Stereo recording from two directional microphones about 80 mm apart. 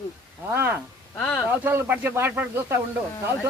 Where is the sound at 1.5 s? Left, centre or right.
Right.